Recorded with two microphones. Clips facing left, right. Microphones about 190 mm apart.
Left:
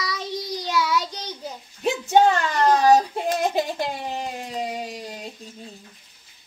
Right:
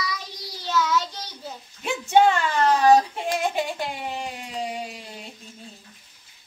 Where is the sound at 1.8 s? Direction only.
40° left (ahead or behind).